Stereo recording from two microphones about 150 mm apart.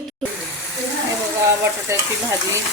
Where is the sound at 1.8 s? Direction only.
20° right (ahead or behind).